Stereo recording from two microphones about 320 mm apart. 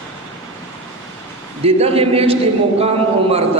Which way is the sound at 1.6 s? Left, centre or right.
Centre.